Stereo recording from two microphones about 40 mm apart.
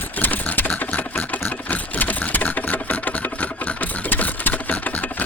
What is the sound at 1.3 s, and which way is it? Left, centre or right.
Sewing machine, left.